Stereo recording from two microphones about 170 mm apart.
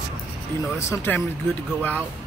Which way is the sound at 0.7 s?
15° left (ahead or behind).